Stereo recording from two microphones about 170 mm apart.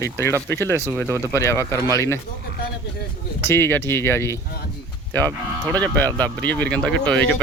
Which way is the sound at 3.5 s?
10° left (ahead or behind).